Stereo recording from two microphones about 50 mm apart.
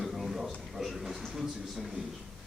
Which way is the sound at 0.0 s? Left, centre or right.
Centre.